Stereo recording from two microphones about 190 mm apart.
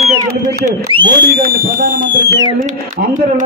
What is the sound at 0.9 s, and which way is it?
Speech, 25° right (ahead or behind).